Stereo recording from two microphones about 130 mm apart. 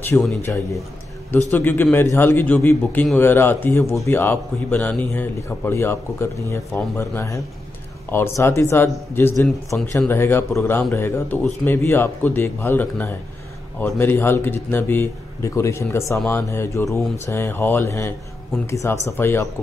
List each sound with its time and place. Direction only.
0.1 s speech: 15° left (ahead or behind)
1.5 s speech: 15° left (ahead or behind)